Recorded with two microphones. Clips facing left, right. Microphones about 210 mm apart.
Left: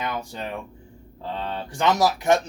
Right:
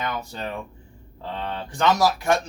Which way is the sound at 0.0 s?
15° left (ahead or behind).